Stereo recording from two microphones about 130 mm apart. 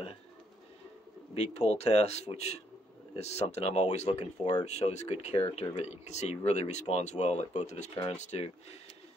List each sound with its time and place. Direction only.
1.3 s speech: 55° left (ahead or behind)